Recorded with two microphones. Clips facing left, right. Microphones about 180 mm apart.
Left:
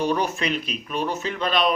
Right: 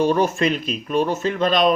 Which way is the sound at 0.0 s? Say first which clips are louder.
Right 6 dB; 45° right (ahead or behind).